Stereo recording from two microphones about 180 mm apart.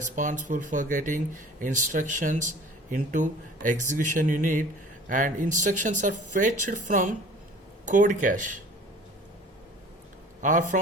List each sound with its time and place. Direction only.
0.2 s speech: 45° right (ahead or behind)
10.4 s speech: 45° right (ahead or behind)